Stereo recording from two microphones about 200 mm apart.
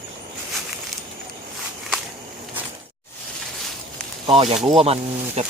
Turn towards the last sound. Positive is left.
turn(degrees=-35)  # may be behind; listen again after turning